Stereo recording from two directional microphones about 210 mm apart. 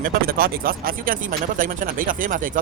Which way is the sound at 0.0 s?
45° right (ahead or behind).